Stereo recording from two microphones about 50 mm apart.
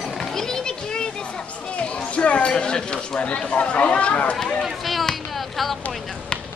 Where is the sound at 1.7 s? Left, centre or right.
Left.